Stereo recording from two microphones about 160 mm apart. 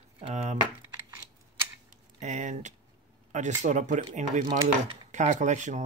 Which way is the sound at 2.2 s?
50° right (ahead or behind).